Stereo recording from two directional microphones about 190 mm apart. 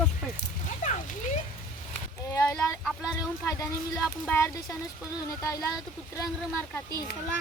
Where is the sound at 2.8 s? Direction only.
5° left (ahead or behind).